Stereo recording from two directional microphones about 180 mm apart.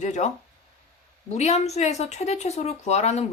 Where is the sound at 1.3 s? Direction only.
35° left (ahead or behind).